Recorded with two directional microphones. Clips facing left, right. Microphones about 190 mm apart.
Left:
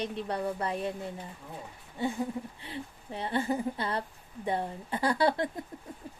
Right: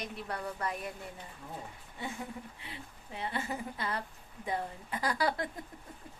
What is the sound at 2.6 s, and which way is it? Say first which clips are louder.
Speech: left 7 dB; 30° left (ahead or behind).